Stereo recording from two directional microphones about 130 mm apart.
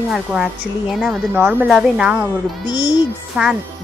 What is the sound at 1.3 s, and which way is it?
Speech, 15° right (ahead or behind).